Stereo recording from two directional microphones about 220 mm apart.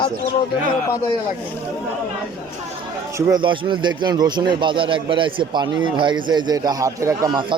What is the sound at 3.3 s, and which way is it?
A man's voice, 20° right (ahead or behind).